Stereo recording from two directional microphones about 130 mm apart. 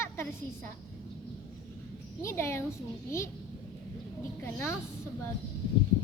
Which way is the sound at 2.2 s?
20° left (ahead or behind).